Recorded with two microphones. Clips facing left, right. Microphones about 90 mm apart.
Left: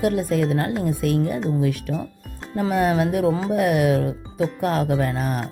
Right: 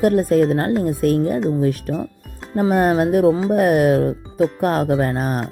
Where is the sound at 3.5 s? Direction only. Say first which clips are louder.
Right 4 dB; 45° right (ahead or behind).